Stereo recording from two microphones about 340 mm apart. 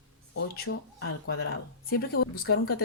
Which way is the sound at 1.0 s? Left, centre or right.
Left.